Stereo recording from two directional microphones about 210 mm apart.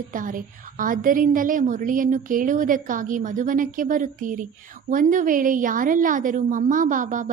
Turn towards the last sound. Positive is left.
turn(degrees=-40)  # may be behind; listen again after turning